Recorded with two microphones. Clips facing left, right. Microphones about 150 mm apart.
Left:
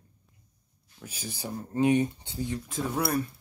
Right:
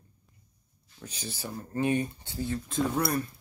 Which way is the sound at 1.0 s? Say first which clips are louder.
Left 1 dB; 10° left (ahead or behind).